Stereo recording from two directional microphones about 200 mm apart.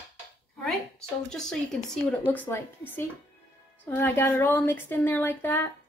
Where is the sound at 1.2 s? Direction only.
5° left (ahead or behind).